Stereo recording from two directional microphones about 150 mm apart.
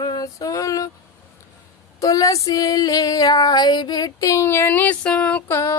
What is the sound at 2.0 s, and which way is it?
Female singing, 20° left (ahead or behind).